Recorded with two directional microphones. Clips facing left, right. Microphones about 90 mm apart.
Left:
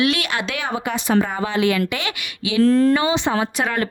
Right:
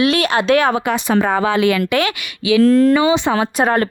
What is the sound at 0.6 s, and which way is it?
A woman's voice, 70° right (ahead or behind).